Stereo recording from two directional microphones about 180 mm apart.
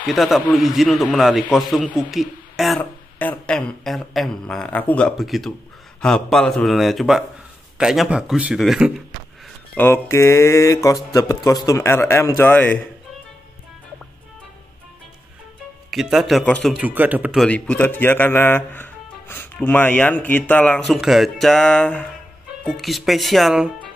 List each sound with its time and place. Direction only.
0.0 s a man's voice: centre (ahead or behind)
2.8 s a man's voice: 10° left (ahead or behind)
9.8 s speech: 15° left (ahead or behind)
15.9 s a man's voice: centre (ahead or behind)
17.5 s a man's voice: 5° left (ahead or behind)